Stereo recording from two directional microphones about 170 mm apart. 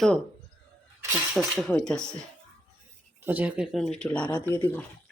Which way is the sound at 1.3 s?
Centre (ahead or behind).